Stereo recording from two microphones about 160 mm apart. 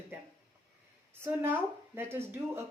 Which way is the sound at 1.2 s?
10° right (ahead or behind).